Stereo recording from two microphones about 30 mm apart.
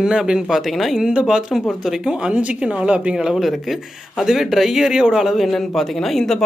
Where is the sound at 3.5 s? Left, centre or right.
Centre.